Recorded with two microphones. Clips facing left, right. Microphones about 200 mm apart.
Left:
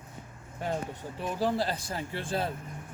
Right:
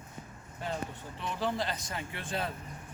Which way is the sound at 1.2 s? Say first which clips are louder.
Left 4 dB; 40° left (ahead or behind).